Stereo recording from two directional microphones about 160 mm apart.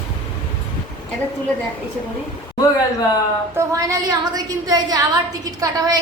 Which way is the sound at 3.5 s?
20° right (ahead or behind).